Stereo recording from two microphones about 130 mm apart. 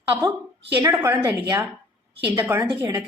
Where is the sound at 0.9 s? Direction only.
15° right (ahead or behind).